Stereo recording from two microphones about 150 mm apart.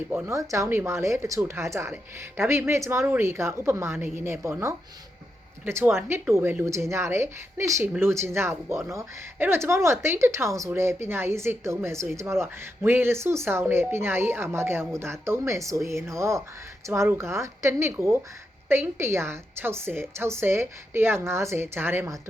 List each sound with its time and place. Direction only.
0.1 s speech: 15° right (ahead or behind)